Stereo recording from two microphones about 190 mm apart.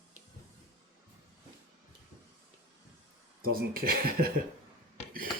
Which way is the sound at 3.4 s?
50° right (ahead or behind).